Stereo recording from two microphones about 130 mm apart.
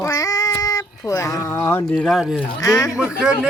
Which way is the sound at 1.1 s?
25° left (ahead or behind).